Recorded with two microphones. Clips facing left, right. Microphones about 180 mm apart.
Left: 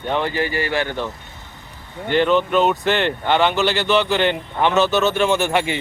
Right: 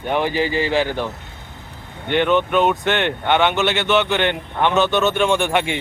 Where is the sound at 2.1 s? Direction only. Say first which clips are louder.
Even; centre (ahead or behind).